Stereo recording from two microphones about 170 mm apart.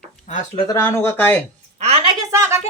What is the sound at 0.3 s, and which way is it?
Speech, 45° left (ahead or behind).